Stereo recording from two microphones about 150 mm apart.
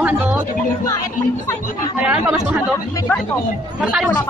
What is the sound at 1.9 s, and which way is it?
Speech, 10° right (ahead or behind).